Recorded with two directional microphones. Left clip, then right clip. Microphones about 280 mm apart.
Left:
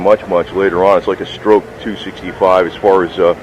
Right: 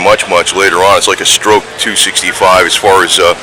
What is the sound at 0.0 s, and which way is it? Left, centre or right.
Speech, centre.